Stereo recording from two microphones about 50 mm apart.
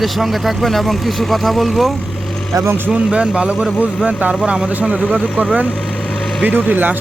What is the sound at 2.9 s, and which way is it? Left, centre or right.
Speech, right.